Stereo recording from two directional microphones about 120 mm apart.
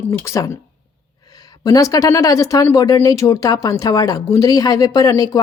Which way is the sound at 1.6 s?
30° left (ahead or behind).